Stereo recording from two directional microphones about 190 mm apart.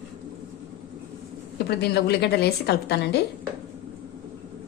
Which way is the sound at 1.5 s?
60° left (ahead or behind).